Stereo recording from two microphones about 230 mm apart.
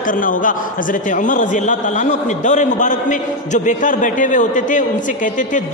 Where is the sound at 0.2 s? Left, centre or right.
Left.